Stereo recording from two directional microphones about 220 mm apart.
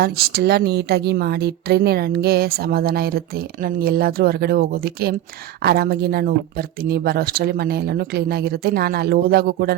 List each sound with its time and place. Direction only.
0.0 s a woman's voice: 45° right (ahead or behind)